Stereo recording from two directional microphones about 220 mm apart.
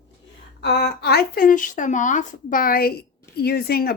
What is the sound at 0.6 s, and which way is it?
Speech, 50° left (ahead or behind).